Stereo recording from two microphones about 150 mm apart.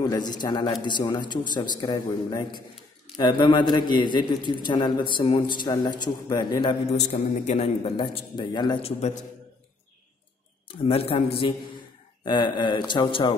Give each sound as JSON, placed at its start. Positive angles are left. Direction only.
{"t": 0.0, "sound": "a man's voice", "side_deg": 30}
{"t": 8.2, "sound": "a man's voice", "side_deg": 30}
{"t": 10.7, "sound": "a man's voice", "side_deg": 40}
{"t": 12.3, "sound": "a man's voice", "side_deg": 30}